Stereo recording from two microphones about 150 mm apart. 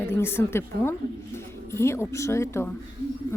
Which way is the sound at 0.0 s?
15° left (ahead or behind).